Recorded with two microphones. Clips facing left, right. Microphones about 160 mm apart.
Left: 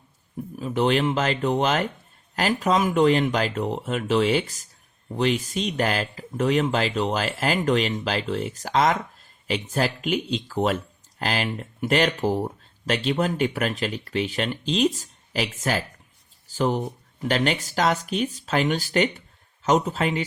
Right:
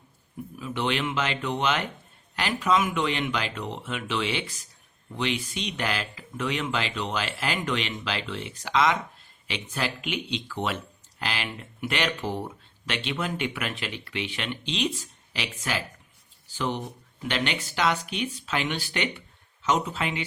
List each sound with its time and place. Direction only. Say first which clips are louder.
0.5 s speech: left 7 dB; 40° left (ahead or behind)